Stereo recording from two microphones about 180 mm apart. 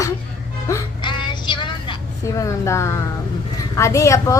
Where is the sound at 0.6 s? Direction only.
20° left (ahead or behind).